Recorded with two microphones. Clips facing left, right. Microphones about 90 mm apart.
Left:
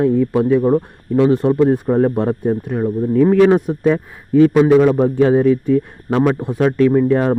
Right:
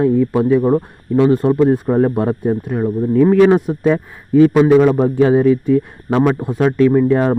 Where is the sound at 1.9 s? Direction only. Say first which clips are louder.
Even; 15° right (ahead or behind).